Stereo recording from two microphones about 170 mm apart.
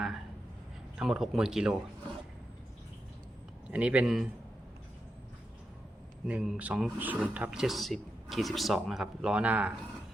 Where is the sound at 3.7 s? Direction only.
10° right (ahead or behind).